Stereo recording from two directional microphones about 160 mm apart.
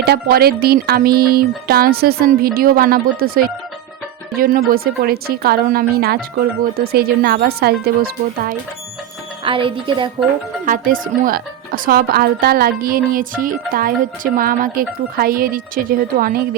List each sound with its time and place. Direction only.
0.0 s a woman's voice: 80° right
9.4 s speech: 35° right (ahead or behind)
10.7 s a woman's voice: 60° right (ahead or behind)